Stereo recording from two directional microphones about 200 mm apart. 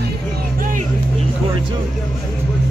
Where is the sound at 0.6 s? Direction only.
45° right (ahead or behind).